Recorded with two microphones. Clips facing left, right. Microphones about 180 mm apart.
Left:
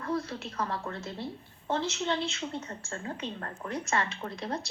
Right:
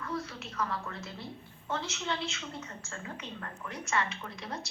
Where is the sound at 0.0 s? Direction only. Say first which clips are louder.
Left 5 dB; 35° left (ahead or behind).